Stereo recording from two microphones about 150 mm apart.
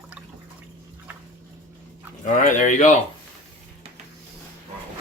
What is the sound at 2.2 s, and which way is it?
Speech, 60° left (ahead or behind).